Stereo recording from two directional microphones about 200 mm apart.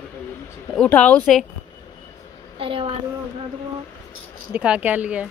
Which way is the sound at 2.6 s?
25° right (ahead or behind).